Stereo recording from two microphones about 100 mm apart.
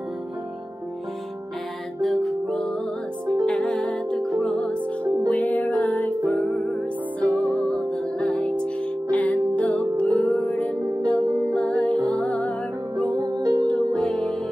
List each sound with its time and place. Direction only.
2.0 s music: 5° left (ahead or behind)
7.4 s music: 35° right (ahead or behind)
7.9 s music: 10° left (ahead or behind)
13.1 s music: 45° right (ahead or behind)
13.7 s music: 10° left (ahead or behind)